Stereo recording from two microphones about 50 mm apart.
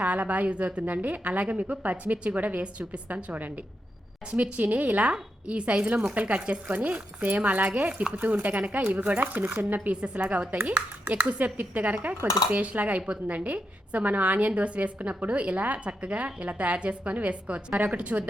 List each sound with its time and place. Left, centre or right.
0.0 s a woman's voice: right
4.5 s a woman's voice: right
9.9 s a woman's voice: right